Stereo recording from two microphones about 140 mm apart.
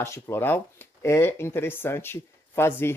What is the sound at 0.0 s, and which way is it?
Speech, 20° left (ahead or behind).